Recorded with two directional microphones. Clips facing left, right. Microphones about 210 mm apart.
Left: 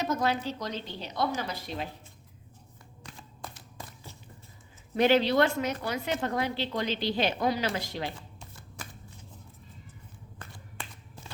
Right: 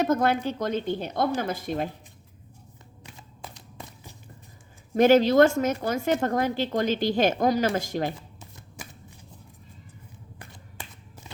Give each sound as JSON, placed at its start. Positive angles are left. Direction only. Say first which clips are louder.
{"t": 0.0, "sound": "a woman's voice", "louder": "right 6 dB", "side_deg": -55}
{"t": 3.5, "sound": "a sound", "louder": "right 2 dB", "side_deg": -15}
{"t": 4.9, "sound": "a woman's voice", "louder": "right 6 dB", "side_deg": -45}